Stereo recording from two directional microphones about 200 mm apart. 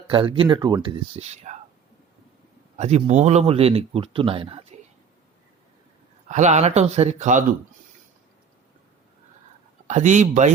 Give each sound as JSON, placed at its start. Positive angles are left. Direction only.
{"t": 0.1, "sound": "speech", "side_deg": -25}
{"t": 2.7, "sound": "speech", "side_deg": -35}
{"t": 6.2, "sound": "speech", "side_deg": -35}
{"t": 9.8, "sound": "speech", "side_deg": -35}